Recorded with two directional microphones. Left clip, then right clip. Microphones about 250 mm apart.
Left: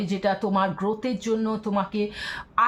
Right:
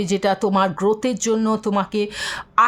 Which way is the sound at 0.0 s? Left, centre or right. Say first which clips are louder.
Right 6 dB; right.